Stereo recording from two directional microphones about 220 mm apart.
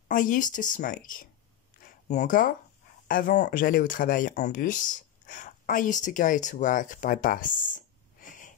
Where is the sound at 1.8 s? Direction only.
35° left (ahead or behind).